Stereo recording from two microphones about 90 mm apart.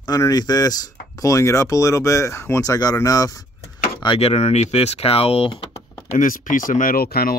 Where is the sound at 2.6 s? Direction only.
45° left (ahead or behind).